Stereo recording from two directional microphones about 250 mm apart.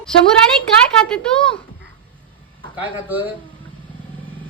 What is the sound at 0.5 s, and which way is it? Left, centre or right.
Speech, centre.